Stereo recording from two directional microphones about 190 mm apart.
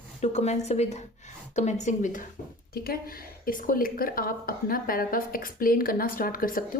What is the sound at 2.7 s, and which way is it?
A woman's voice, 50° left (ahead or behind).